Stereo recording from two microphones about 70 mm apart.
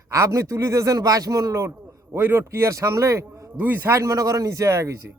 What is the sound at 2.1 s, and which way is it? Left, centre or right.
A man's voice, right.